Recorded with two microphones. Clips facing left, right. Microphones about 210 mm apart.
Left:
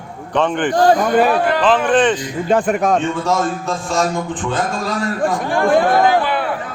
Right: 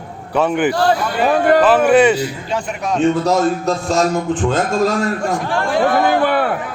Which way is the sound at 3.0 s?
40° right (ahead or behind).